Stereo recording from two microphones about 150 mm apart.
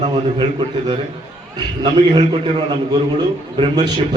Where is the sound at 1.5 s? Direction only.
30° right (ahead or behind).